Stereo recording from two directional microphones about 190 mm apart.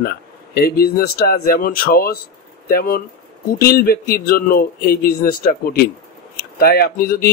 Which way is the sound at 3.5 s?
50° left (ahead or behind).